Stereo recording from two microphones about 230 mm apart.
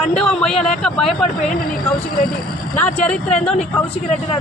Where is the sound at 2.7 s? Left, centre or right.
Centre.